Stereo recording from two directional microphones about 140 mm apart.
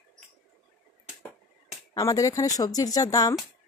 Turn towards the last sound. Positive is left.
turn(degrees=25)  # may be behind; listen again after turning